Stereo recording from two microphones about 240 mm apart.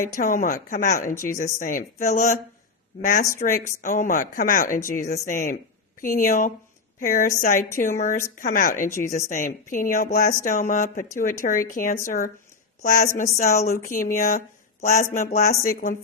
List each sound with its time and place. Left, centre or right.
0.2 s a woman's voice: left